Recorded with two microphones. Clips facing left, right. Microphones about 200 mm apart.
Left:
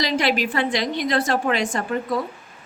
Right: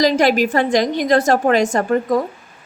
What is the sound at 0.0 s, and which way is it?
Speech, 45° right (ahead or behind).